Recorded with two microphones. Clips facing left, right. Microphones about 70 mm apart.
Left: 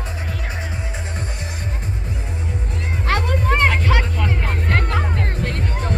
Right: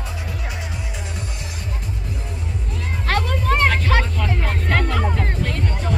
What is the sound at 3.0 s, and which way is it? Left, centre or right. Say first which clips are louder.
Music: even; centre.